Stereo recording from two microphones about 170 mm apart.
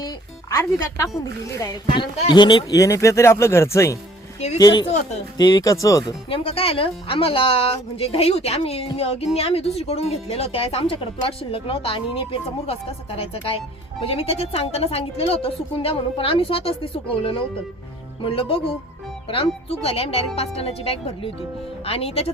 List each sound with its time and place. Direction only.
0.5 s speech: 15° left (ahead or behind)
4.9 s speech: 40° left (ahead or behind)
5.4 s speech: 20° left (ahead or behind)